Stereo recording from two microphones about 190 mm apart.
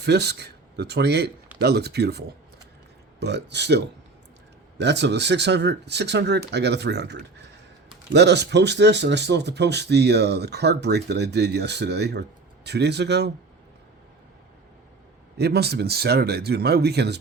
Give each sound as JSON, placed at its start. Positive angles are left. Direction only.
{"t": 0.0, "sound": "speech", "side_deg": -60}
{"t": 15.4, "sound": "speech", "side_deg": -60}